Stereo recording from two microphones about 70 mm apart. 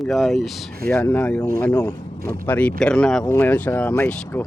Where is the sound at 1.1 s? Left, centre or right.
Left; by 3.2 s centre.